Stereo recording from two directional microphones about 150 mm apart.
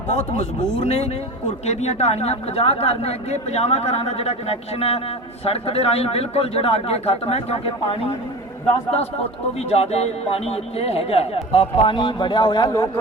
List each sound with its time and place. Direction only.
0.1 s speech: 50° left (ahead or behind)
9.6 s speech: 45° left (ahead or behind); by 12.8 s 30° left (ahead or behind)